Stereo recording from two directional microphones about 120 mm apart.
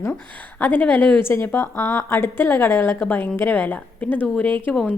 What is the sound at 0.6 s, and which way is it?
A woman's voice, 15° left (ahead or behind).